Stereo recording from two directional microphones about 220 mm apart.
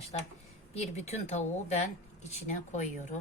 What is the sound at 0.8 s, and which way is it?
A woman's voice, 30° left (ahead or behind).